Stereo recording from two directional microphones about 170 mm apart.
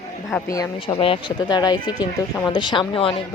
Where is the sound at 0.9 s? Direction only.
30° left (ahead or behind).